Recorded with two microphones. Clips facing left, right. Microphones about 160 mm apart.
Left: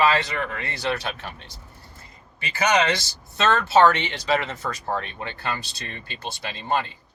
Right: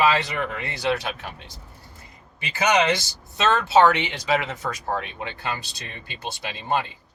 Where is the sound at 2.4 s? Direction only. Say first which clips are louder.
Right 1 dB; 20° right (ahead or behind).